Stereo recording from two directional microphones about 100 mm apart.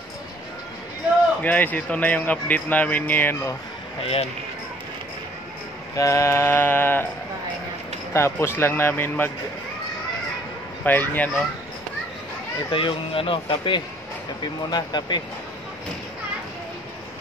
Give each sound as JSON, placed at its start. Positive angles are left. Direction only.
{"t": 1.4, "sound": "speech", "side_deg": 15}
{"t": 4.0, "sound": "speech", "side_deg": 75}
{"t": 5.9, "sound": "speech", "side_deg": 30}
{"t": 8.1, "sound": "speech", "side_deg": 25}
{"t": 10.8, "sound": "speech", "side_deg": 15}
{"t": 12.7, "sound": "speech", "side_deg": 65}